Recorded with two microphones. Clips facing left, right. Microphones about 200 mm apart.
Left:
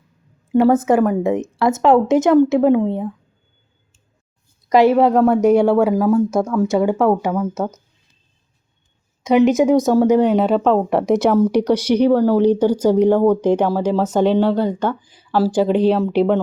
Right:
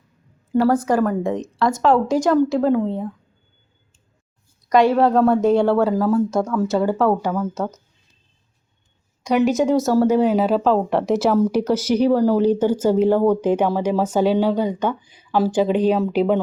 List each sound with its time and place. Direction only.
0.5 s speech: 20° left (ahead or behind)
4.7 s a woman's voice: 20° left (ahead or behind)
9.2 s speech: 20° left (ahead or behind)
9.6 s speech: centre (ahead or behind)
9.9 s a woman's voice: 15° left (ahead or behind)
10.2 s speech: 5° right (ahead or behind)
12.5 s a woman's voice: 10° left (ahead or behind)
13.1 s speech: 10° right (ahead or behind)